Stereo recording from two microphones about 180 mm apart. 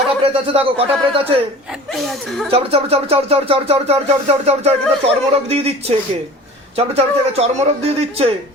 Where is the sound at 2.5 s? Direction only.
35° right (ahead or behind).